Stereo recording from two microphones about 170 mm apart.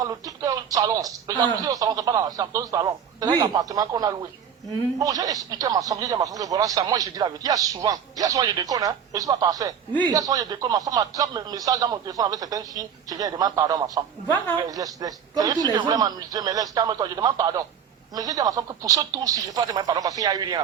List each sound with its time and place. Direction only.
0.0 s speech: 20° right (ahead or behind)